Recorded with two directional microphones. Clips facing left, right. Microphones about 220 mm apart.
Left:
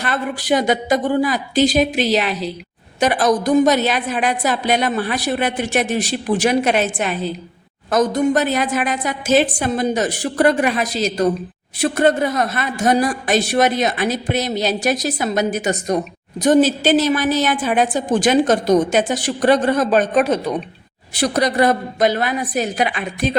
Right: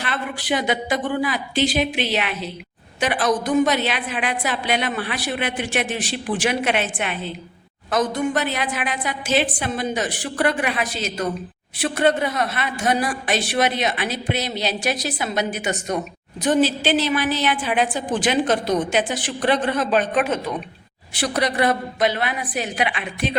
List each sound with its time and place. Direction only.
0.0 s a woman's voice: 40° left (ahead or behind)